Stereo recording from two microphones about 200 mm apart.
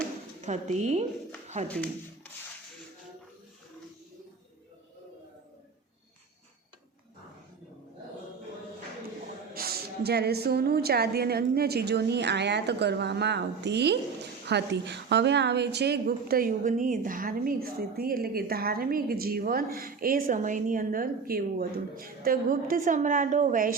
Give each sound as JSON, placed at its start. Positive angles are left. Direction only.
{"t": 0.4, "sound": "speech", "side_deg": -35}
{"t": 1.6, "sound": "speech", "side_deg": 5}
{"t": 9.6, "sound": "a woman's voice", "side_deg": -50}